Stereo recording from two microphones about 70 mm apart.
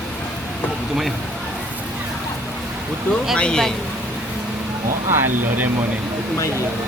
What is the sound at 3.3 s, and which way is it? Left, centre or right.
Speech, centre.